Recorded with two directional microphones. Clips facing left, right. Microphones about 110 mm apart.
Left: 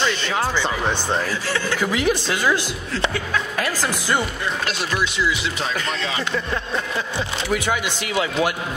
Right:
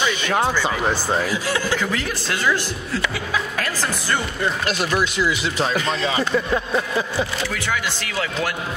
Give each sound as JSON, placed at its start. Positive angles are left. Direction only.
{"t": 0.0, "sound": "speech", "side_deg": -10}
{"t": 1.8, "sound": "a woman's voice", "side_deg": 15}
{"t": 6.5, "sound": "speech", "side_deg": -10}
{"t": 7.4, "sound": "speech", "side_deg": 20}